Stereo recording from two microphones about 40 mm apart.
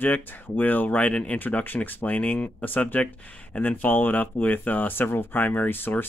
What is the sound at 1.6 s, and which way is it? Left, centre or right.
Speech, left.